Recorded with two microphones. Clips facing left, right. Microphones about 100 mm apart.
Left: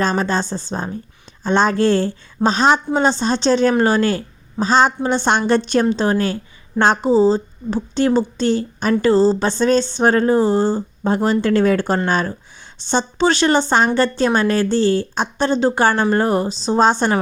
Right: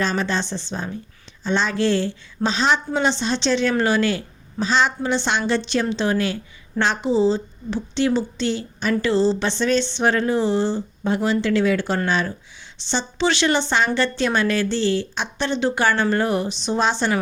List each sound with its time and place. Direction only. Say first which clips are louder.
0.0 s a woman's voice: left 4 dB; 40° left (ahead or behind)